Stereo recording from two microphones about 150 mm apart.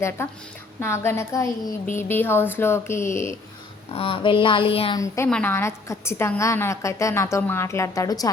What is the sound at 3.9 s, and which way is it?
Speech, 40° left (ahead or behind).